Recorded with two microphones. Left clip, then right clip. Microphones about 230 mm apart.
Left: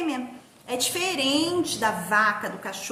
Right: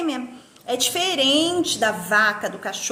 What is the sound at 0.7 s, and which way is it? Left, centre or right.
A woman's voice, centre.